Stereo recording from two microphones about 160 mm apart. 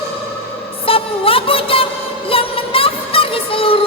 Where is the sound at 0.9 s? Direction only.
35° left (ahead or behind).